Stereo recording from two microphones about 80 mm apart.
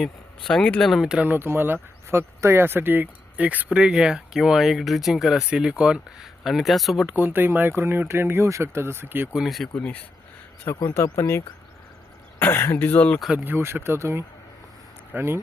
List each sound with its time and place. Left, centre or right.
0.0 s speech: centre
1.0 s speech: centre
1.3 s speech: right
3.7 s speech: centre
7.1 s speech: right
9.3 s speech: centre
9.7 s speech: centre
10.9 s speech: left
13.3 s speech: right